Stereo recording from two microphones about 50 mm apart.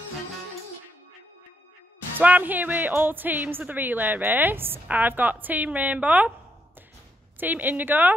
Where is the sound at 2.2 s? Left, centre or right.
Right.